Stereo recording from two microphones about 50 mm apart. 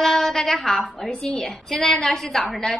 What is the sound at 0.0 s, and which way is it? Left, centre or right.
A woman's voice, centre.